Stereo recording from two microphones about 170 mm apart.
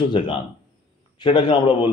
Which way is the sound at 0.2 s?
30° left (ahead or behind).